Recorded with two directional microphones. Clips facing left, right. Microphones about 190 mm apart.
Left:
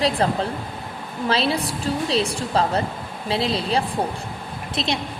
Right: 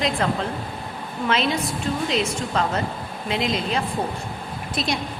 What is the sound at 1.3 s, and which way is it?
A woman's voice, 35° left (ahead or behind).